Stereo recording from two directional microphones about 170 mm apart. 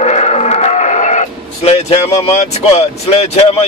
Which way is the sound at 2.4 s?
40° left (ahead or behind).